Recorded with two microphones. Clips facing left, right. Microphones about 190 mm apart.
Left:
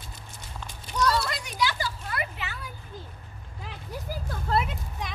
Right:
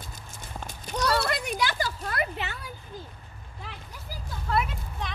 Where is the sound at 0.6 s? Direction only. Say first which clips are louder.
Left 2 dB; 55° right (ahead or behind).